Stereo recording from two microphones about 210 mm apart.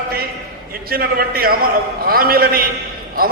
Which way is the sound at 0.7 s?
45° right (ahead or behind).